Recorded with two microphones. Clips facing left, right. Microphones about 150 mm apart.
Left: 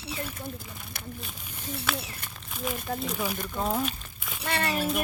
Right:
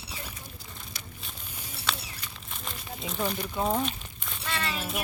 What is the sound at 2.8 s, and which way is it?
Speech, 50° left (ahead or behind).